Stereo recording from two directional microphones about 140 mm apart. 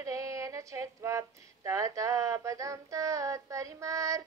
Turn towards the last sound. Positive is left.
turn(degrees=-20)  # may be behind; listen again after turning